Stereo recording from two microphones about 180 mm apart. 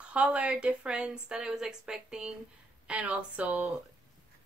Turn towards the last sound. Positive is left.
turn(degrees=-5)  # may be behind; listen again after turning